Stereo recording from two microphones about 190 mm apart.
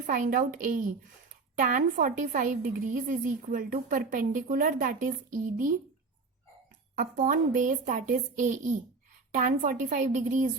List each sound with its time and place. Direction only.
0.0 s a woman's voice: 45° right (ahead or behind)
6.9 s a woman's voice: 45° right (ahead or behind)